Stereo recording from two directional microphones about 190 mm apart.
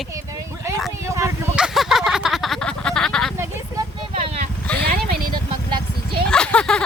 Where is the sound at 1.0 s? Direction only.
15° right (ahead or behind).